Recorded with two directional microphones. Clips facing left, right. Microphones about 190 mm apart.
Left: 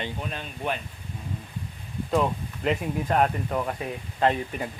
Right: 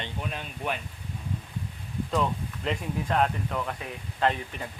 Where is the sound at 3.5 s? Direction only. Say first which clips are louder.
Left 4 dB; 20° left (ahead or behind).